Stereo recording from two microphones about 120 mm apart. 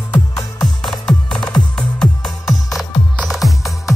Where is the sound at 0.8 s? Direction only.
5° left (ahead or behind).